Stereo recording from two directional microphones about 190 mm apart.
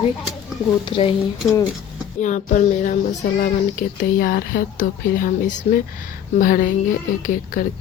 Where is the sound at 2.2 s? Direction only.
40° left (ahead or behind).